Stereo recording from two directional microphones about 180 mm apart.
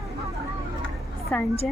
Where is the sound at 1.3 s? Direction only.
Centre (ahead or behind).